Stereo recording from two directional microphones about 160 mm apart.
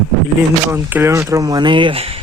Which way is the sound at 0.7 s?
15° right (ahead or behind).